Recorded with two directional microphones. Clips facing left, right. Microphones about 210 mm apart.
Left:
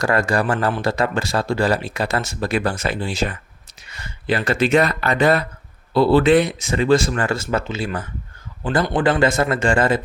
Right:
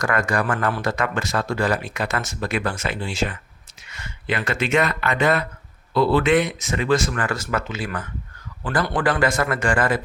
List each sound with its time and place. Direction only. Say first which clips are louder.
0.0 s speech: left 3 dB; 30° left (ahead or behind)